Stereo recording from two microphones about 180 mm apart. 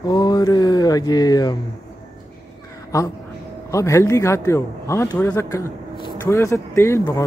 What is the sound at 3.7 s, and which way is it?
A man's voice, 15° left (ahead or behind).